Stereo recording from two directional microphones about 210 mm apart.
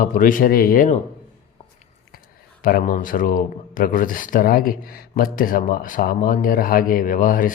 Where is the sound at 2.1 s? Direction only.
45° left (ahead or behind).